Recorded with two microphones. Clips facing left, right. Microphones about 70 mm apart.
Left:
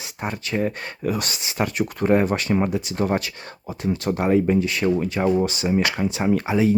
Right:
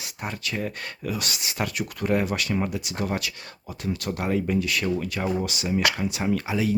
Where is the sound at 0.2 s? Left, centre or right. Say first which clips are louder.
Left 6 dB; left.